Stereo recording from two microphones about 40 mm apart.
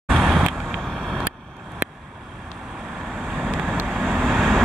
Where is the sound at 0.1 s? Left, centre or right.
Centre.